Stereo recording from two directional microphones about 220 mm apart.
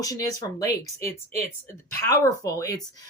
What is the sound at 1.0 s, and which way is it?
Speech, 30° right (ahead or behind).